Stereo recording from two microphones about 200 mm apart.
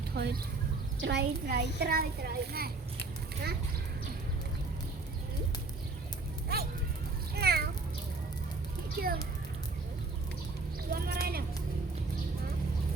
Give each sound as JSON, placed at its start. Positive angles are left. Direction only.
{"t": 0.1, "sound": "a child's voice", "side_deg": -50}
{"t": 6.5, "sound": "speech", "side_deg": -50}
{"t": 7.3, "sound": "a sound", "side_deg": -50}
{"t": 9.0, "sound": "a child's voice", "side_deg": -45}
{"t": 10.9, "sound": "a child's voice", "side_deg": -50}